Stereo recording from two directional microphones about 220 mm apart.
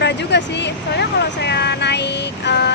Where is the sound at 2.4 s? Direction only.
50° left (ahead or behind).